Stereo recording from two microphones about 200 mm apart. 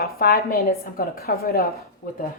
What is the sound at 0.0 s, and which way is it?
A woman's voice, 45° left (ahead or behind).